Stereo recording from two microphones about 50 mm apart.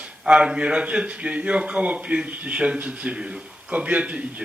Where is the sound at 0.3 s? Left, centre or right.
Centre.